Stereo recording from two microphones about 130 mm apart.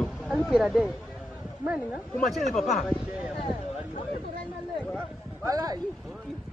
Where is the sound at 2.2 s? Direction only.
Centre (ahead or behind).